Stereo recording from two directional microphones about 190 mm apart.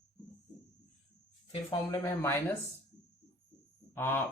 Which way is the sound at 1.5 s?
20° left (ahead or behind).